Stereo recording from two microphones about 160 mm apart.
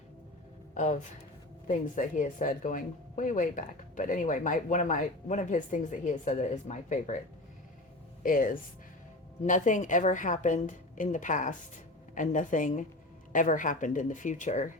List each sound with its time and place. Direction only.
0.7 s speech: 50° left (ahead or behind)
8.2 s speech: 60° left (ahead or behind)